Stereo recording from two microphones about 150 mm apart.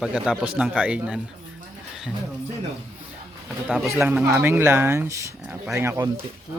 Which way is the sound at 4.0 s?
10° right (ahead or behind).